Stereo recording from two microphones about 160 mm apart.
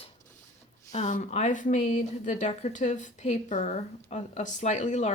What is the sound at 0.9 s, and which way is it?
A woman's voice, 45° left (ahead or behind).